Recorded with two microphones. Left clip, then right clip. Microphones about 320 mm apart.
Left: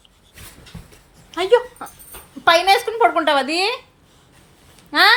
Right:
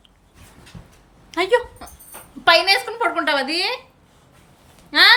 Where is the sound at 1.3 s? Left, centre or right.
Centre.